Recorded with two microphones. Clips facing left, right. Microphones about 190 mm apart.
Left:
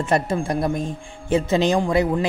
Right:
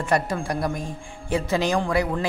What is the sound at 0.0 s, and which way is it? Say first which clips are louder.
A man's voice: left 3 dB; 25° left (ahead or behind).